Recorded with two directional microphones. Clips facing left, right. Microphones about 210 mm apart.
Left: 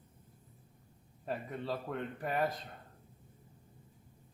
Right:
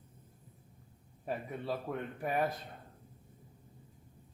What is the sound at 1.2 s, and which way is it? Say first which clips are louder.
Speech: even; 10° right (ahead or behind).